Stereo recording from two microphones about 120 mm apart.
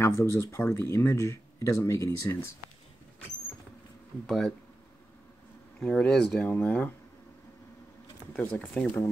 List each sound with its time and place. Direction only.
0.0 s speech: 20° left (ahead or behind)
4.3 s speech: 5° left (ahead or behind)
5.8 s speech: 10° left (ahead or behind)
8.3 s speech: 15° left (ahead or behind)